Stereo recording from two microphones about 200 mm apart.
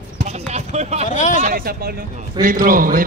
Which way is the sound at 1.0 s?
40° left (ahead or behind).